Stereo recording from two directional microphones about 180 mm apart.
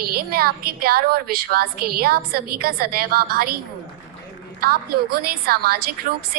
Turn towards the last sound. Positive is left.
turn(degrees=-55)  # may be behind; listen again after turning